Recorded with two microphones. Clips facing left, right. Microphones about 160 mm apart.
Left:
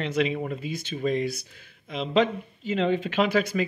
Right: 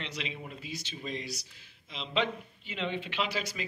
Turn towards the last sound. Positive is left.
turn(degrees=55)  # may be behind; listen again after turning